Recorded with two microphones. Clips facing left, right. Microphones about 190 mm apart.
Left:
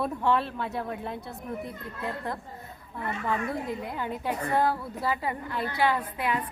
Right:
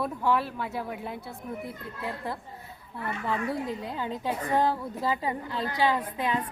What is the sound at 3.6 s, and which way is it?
Speech, 15° left (ahead or behind).